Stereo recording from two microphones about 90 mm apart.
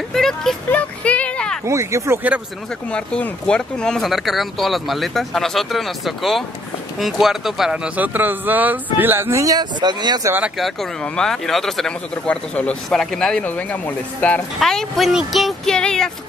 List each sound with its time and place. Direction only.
0.1 s speech: 5° left (ahead or behind)
0.7 s a sound: 15° left (ahead or behind)
1.7 s speech: 35° right (ahead or behind)
2.9 s speech: 10° left (ahead or behind); by 9.4 s 25° right (ahead or behind)
9.4 s speech: 45° right (ahead or behind)
10.6 s speech: 5° left (ahead or behind)
13.5 s speech: 20° left (ahead or behind)
14.6 s speech: 5° left (ahead or behind)